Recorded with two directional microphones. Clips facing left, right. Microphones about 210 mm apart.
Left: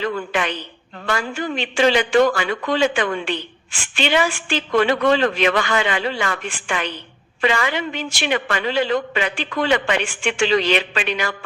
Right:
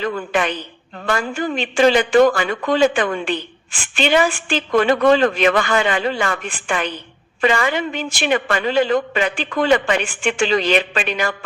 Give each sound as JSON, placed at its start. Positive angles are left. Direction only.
{"t": 0.0, "sound": "a man's voice", "side_deg": -45}